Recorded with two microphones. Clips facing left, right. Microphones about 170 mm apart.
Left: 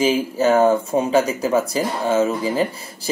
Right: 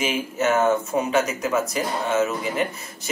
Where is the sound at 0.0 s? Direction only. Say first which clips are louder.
Left 6 dB; 30° left (ahead or behind).